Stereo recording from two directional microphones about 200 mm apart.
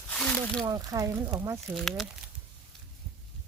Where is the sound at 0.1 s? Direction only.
5° left (ahead or behind).